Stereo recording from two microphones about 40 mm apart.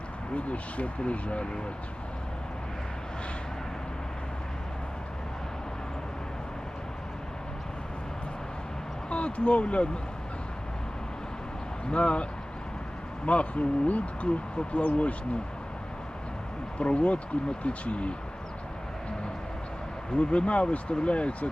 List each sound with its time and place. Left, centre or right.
0.3 s speech: left
9.0 s speech: left
11.9 s speech: left
16.7 s speech: left
20.1 s speech: left